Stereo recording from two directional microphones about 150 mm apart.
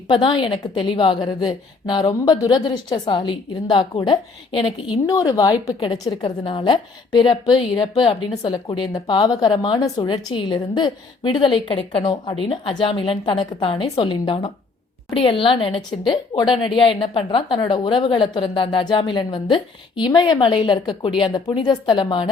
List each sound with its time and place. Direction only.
0.1 s a woman's voice: 30° left (ahead or behind)
5.0 s a woman's voice: 25° left (ahead or behind)